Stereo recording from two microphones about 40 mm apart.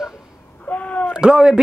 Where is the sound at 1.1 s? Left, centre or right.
Right.